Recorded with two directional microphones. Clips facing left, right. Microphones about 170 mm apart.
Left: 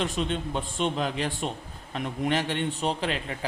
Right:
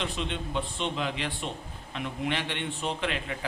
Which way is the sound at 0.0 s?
45° left (ahead or behind).